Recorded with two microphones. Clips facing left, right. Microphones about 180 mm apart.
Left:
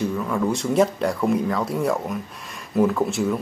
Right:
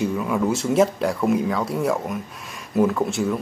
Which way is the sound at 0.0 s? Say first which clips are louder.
Right 1 dB; 10° right (ahead or behind).